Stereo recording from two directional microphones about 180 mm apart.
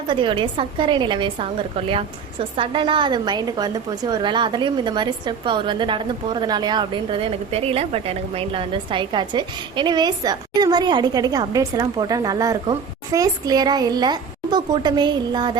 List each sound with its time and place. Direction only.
0.1 s a woman's voice: 25° right (ahead or behind)